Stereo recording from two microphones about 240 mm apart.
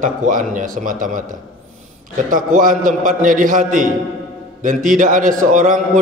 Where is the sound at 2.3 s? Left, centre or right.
Right.